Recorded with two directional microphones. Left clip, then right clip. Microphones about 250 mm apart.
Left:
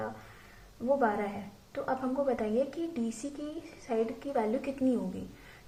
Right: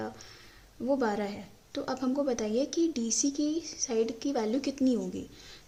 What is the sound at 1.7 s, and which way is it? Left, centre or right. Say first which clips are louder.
Speech: even; right.